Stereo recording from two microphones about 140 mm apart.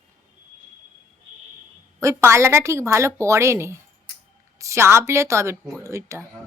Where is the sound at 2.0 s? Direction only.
20° right (ahead or behind).